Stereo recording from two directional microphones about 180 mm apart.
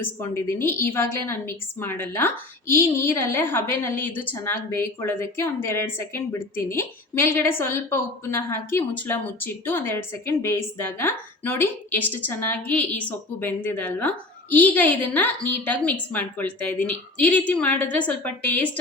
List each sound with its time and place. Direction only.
0.2 s a woman's voice: 15° left (ahead or behind)